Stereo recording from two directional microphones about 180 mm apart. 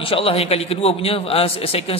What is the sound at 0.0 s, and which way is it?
A man's voice, 30° left (ahead or behind).